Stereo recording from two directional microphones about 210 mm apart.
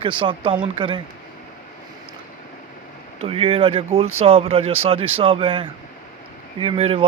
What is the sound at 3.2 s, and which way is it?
Mantra, 25° right (ahead or behind).